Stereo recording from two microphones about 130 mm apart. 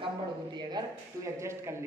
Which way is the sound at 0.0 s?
35° right (ahead or behind).